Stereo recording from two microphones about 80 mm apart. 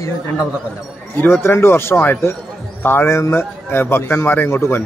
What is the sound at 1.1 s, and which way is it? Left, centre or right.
A man's voice, left.